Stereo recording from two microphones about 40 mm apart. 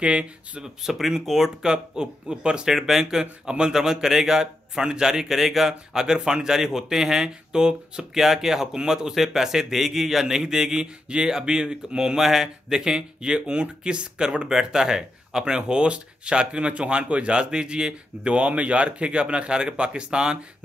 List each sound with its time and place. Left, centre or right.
0.0 s speech: right
0.8 s a man's voice: centre
2.7 s a man's voice: centre
12.2 s speech: centre
18.3 s speech: right